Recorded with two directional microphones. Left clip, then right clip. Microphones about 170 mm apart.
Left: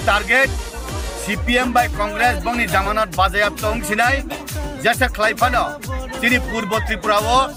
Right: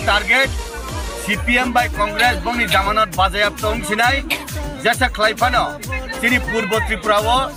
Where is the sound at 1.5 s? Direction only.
25° left (ahead or behind).